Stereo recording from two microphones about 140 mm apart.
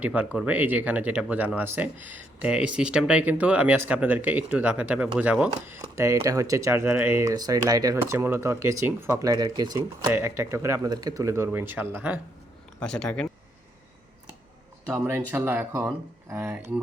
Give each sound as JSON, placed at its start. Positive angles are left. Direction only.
{"t": 0.0, "sound": "speech", "side_deg": -10}
{"t": 10.1, "sound": "speech", "side_deg": -15}
{"t": 12.8, "sound": "speech", "side_deg": 5}
{"t": 14.9, "sound": "speech", "side_deg": -15}